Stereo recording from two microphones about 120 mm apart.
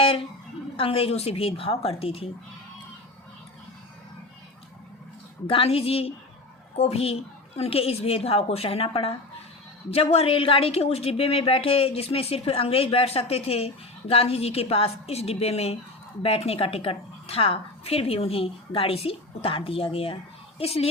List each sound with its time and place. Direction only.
0.8 s a woman's voice: 50° left (ahead or behind)
5.5 s a woman's voice: 55° left (ahead or behind)